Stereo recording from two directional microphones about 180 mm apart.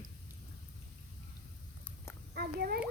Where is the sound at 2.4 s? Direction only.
60° right (ahead or behind).